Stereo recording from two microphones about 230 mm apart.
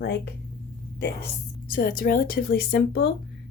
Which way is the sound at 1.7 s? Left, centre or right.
Left.